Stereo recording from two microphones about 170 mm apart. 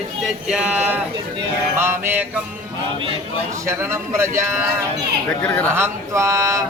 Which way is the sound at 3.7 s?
15° right (ahead or behind).